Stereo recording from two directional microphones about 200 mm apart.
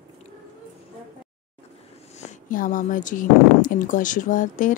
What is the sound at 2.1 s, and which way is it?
Speech, 40° left (ahead or behind).